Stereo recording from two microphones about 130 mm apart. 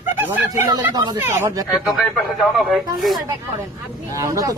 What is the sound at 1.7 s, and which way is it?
Speech, centre (ahead or behind).